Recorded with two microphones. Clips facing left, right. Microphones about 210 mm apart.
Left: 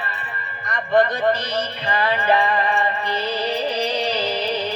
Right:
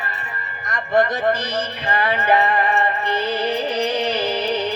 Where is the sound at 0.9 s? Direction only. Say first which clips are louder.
Even; 20° right (ahead or behind).